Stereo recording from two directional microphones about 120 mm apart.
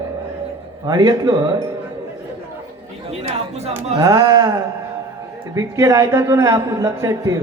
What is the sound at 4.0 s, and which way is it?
A man's voice, 30° right (ahead or behind).